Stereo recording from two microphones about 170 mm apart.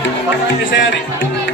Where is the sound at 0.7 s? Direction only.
90° left.